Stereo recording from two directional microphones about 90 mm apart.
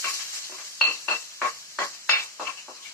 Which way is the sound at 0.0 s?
30° left (ahead or behind).